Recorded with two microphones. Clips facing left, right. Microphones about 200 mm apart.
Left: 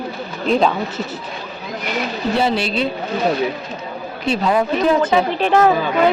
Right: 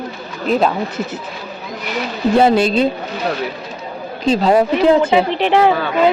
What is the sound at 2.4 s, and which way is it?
Speech, 50° right (ahead or behind).